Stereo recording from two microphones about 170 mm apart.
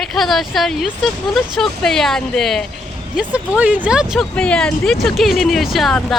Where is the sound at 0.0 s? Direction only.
Centre (ahead or behind).